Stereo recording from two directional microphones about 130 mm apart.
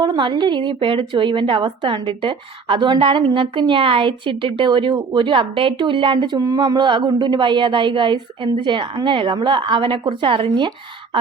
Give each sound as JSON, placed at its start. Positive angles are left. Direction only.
{"t": 0.0, "sound": "a woman's voice", "side_deg": -35}